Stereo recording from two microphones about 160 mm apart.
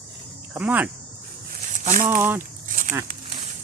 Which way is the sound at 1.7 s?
55° right (ahead or behind).